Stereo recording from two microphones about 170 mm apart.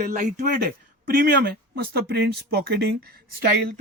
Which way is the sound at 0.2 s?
50° right (ahead or behind).